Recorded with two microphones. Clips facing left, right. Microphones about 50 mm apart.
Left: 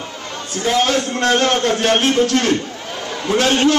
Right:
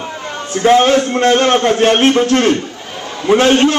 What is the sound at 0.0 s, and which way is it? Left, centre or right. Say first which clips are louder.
A man's voice: right 5 dB; right.